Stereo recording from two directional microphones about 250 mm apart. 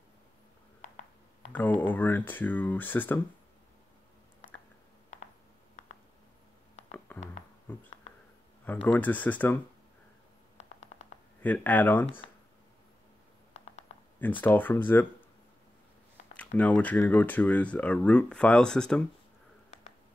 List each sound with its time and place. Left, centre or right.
1.5 s speech: centre
7.1 s a sound: centre
7.7 s insect: centre
8.8 s speech: centre
11.4 s speech: centre
13.5 s a sound: left
14.4 s speech: centre
16.3 s speech: centre